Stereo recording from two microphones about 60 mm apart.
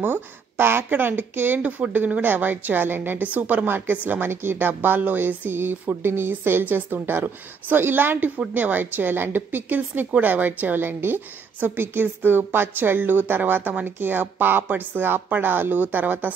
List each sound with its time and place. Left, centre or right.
0.0 s speech: right